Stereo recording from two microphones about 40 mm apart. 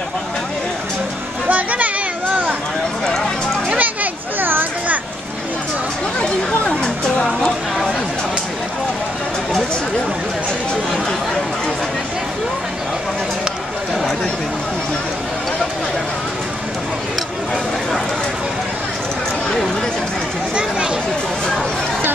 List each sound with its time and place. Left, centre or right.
1.5 s children playing: right
3.7 s children playing: right